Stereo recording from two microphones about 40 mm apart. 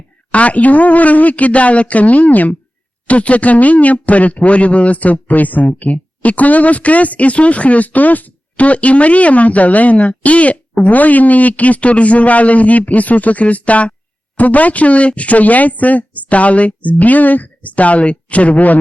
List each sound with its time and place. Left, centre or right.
0.3 s speech: left